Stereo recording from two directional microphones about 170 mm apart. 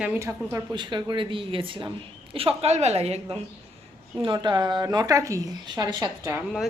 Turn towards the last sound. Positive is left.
turn(degrees=-20)  # may be behind; listen again after turning